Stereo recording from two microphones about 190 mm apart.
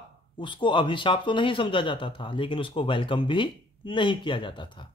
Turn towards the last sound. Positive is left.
turn(degrees=25)  # may be behind; listen again after turning